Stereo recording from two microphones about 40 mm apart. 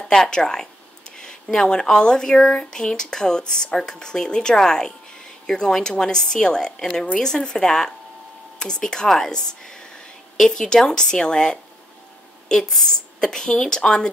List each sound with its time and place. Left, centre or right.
0.0 s a woman's voice: centre